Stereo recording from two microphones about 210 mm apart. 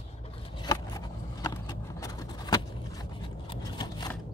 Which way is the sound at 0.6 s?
20° left (ahead or behind).